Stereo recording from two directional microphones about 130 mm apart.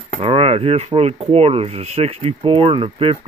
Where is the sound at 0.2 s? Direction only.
50° right (ahead or behind).